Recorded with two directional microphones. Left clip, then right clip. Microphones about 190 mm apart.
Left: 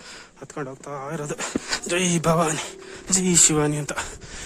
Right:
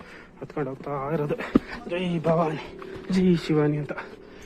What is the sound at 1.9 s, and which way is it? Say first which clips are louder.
Speech: left 3 dB; 90° left.